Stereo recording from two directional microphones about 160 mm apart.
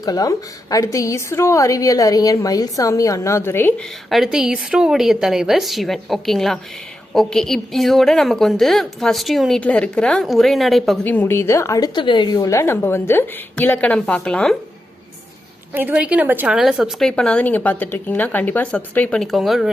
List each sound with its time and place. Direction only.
0.0 s a woman's voice: 25° left (ahead or behind)
4.1 s a woman's voice: centre (ahead or behind)
11.0 s a woman's voice: 10° left (ahead or behind)
15.7 s a woman's voice: 10° right (ahead or behind)